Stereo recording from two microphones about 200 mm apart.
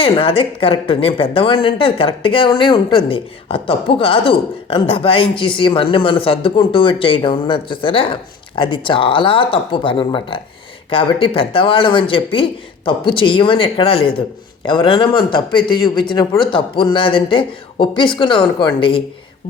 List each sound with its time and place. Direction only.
0.0 s speech: 25° left (ahead or behind)